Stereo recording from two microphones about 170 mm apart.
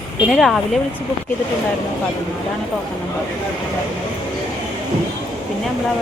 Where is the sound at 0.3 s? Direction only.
Centre (ahead or behind).